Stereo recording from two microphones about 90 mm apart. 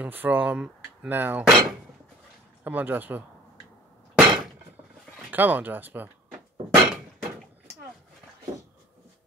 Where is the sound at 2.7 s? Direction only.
20° right (ahead or behind).